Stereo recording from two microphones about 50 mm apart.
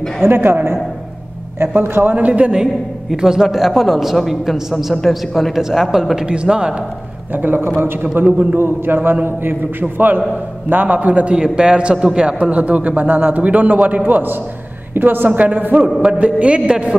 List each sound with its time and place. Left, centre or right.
0.2 s a man's voice: right
2.1 s a man's voice: right
2.6 s a man's voice: centre
5.6 s a man's voice: centre
7.3 s a woman's voice: right
8.5 s a man's voice: right
11.3 s a man's voice: centre